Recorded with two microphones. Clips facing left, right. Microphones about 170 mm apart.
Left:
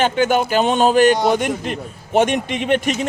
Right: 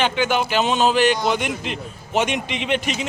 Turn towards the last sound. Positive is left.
turn(degrees=50)  # may be behind; listen again after turning